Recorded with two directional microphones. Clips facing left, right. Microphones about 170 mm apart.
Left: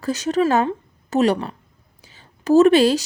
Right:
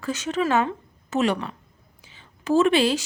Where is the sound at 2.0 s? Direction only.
40° left (ahead or behind).